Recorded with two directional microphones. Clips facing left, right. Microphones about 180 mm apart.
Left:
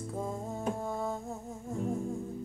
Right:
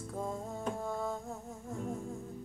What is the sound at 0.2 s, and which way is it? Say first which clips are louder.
Music: left 1 dB; centre (ahead or behind).